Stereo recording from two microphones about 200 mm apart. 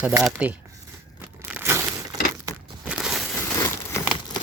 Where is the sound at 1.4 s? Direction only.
10° right (ahead or behind).